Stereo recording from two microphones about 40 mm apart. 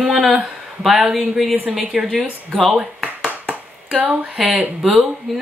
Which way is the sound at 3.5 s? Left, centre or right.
Right.